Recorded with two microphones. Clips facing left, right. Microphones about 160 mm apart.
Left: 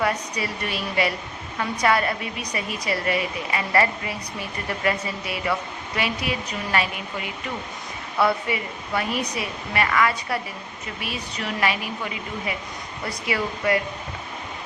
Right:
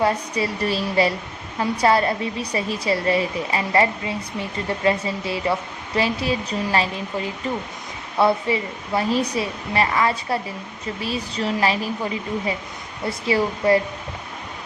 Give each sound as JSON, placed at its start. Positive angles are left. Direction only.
{"t": 0.0, "sound": "a woman's voice", "side_deg": -30}